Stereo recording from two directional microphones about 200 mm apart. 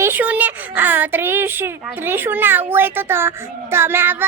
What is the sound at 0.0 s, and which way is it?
Speech, 10° right (ahead or behind).